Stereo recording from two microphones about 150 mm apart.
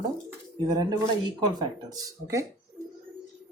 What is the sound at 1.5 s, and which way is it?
Speech, 25° right (ahead or behind).